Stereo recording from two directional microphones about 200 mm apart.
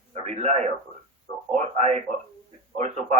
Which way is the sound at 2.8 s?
35° right (ahead or behind).